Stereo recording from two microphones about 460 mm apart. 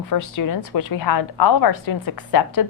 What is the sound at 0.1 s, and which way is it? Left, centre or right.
A woman's voice, left.